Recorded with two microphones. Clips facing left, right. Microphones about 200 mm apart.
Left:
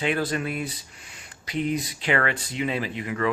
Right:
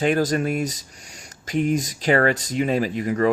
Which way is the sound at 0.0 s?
45° right (ahead or behind).